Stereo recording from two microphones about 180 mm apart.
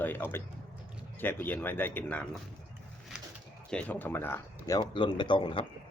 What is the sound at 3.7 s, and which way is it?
Speech, 10° left (ahead or behind).